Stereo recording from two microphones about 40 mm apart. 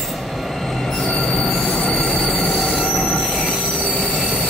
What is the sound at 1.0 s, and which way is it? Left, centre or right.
Train wheels squealing, left.